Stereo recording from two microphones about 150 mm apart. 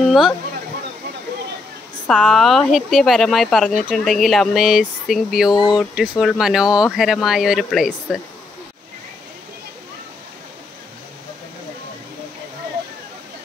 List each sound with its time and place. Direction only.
0.0 s a sound: centre (ahead or behind)
2.0 s speech: 5° left (ahead or behind)
5.5 s speech: 30° left (ahead or behind)
5.8 s speech: centre (ahead or behind)